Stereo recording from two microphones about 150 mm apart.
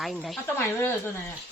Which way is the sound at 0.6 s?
15° left (ahead or behind).